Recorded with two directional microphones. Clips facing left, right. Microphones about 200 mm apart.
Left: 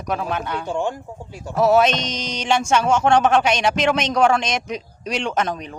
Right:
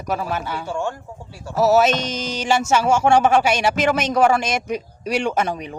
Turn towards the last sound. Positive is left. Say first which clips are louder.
# right 1 dB
turn(degrees=-10)  # may be behind; listen again after turning